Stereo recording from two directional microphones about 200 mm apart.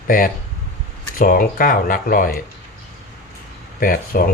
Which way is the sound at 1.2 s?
45° left (ahead or behind).